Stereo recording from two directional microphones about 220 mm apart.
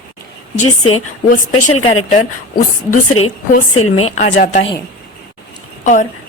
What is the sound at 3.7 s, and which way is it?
Speech, 75° left (ahead or behind).